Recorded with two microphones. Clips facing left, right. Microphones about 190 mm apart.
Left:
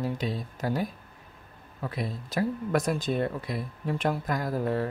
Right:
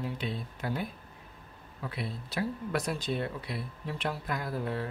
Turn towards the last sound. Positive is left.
turn(degrees=45)  # may be behind; listen again after turning